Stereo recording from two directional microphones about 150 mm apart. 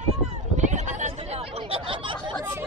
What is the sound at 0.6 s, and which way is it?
Chatter, 55° right (ahead or behind).